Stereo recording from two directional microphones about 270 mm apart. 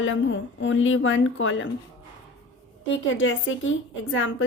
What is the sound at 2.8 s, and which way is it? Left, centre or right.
A woman's voice, left.